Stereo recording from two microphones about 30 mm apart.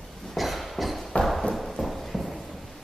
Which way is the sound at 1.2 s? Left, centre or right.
Centre.